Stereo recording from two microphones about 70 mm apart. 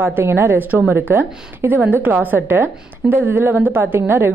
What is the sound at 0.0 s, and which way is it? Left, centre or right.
A woman's voice, right.